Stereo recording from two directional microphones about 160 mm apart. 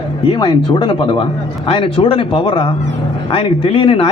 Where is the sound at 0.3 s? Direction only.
30° left (ahead or behind).